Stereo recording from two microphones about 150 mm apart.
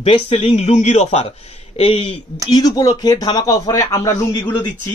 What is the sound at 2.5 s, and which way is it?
A man's voice, 25° left (ahead or behind).